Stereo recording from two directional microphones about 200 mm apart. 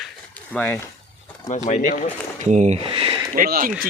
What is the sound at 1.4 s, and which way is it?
Speech, 35° left (ahead or behind).